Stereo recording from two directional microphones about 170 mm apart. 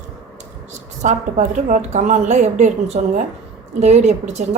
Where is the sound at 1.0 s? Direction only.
45° right (ahead or behind).